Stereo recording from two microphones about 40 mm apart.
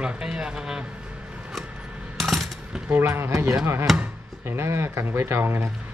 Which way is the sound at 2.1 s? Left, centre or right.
Centre.